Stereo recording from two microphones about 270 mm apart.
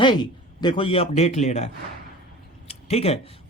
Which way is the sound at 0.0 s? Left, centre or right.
Centre.